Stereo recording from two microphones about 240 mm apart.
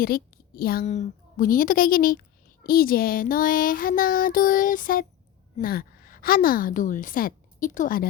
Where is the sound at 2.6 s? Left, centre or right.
Left.